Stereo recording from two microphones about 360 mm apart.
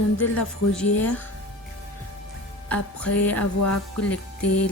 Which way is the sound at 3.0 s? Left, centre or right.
Left.